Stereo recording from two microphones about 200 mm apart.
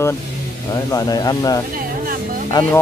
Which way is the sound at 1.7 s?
45° right (ahead or behind).